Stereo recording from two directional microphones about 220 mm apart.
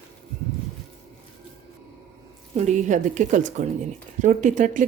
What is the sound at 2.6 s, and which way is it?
A woman's voice, 35° right (ahead or behind).